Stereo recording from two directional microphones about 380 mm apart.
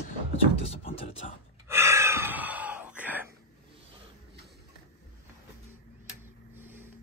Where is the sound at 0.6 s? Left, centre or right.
Centre.